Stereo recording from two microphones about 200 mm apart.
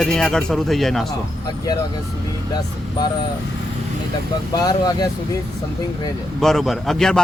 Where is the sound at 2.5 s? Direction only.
20° left (ahead or behind).